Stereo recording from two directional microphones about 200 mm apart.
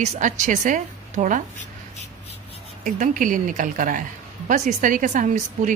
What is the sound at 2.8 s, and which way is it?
A woman's voice, 40° right (ahead or behind).